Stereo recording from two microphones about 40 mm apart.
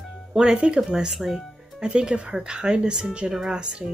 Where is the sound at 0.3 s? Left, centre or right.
Centre.